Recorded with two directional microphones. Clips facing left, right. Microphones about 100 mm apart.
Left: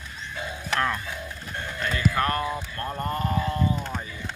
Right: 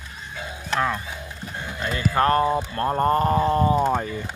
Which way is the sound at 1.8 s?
30° right (ahead or behind).